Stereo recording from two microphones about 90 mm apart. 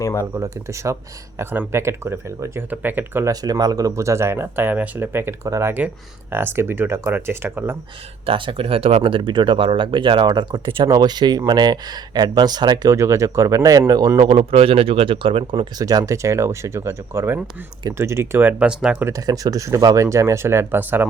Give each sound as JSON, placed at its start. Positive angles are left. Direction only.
{"t": 0.0, "sound": "speech", "side_deg": 30}
{"t": 0.3, "sound": "speech", "side_deg": -35}
{"t": 3.2, "sound": "speech", "side_deg": -45}
{"t": 8.3, "sound": "speech", "side_deg": -85}
{"t": 10.2, "sound": "speech", "side_deg": -55}
{"t": 10.8, "sound": "speech", "side_deg": -50}
{"t": 12.9, "sound": "speech", "side_deg": -35}
{"t": 14.3, "sound": "a man's voice", "side_deg": -90}
{"t": 15.5, "sound": "speech", "side_deg": -45}
{"t": 19.2, "sound": "speech", "side_deg": -45}